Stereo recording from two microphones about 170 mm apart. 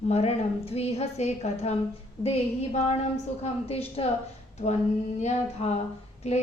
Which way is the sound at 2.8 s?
40° left (ahead or behind).